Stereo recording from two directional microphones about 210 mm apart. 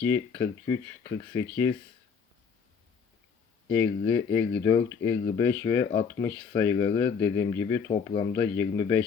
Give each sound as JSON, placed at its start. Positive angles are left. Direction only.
{"t": 0.1, "sound": "speech", "side_deg": 20}
{"t": 3.7, "sound": "speech", "side_deg": 10}